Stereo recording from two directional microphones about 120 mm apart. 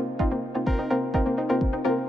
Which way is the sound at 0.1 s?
Centre (ahead or behind).